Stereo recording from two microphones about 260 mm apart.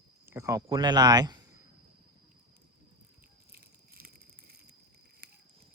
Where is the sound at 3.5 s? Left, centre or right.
Right.